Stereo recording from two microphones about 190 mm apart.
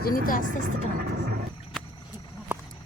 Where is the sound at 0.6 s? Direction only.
50° right (ahead or behind).